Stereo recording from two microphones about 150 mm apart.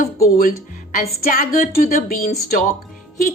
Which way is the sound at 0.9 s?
70° left (ahead or behind).